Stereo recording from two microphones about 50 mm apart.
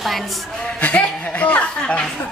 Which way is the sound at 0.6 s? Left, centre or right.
Left.